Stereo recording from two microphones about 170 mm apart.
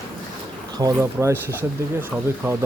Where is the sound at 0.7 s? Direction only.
20° right (ahead or behind).